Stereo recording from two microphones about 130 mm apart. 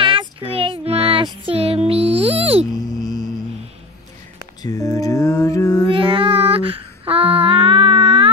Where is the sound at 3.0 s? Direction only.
30° left (ahead or behind).